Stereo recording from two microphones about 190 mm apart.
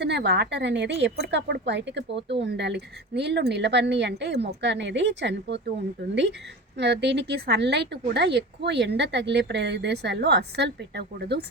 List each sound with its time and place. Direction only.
0.0 s speech: 60° right (ahead or behind)
6.7 s speech: 65° right (ahead or behind)